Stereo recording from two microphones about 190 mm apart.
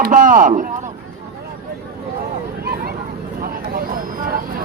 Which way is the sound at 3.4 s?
50° right (ahead or behind).